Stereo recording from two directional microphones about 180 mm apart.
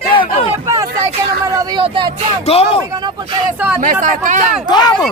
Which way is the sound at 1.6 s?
25° right (ahead or behind).